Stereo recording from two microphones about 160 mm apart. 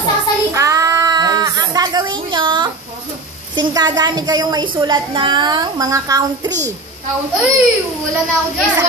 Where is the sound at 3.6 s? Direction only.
25° right (ahead or behind).